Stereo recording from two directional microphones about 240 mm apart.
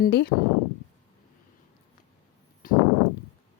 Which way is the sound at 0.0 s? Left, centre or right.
Left.